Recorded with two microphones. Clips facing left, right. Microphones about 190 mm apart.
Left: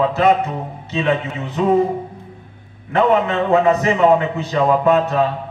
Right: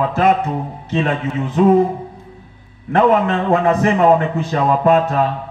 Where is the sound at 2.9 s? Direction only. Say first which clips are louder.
Right 2 dB; 50° right (ahead or behind).